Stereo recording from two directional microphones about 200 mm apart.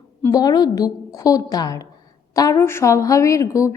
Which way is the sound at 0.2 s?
20° left (ahead or behind).